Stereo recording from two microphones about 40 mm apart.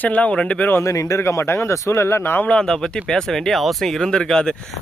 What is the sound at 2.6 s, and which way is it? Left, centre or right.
Speech, centre.